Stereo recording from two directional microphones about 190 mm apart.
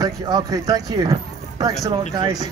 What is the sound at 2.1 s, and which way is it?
Speech, 20° right (ahead or behind).